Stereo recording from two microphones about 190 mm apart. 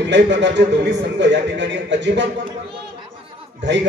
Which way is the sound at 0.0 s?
65° right (ahead or behind).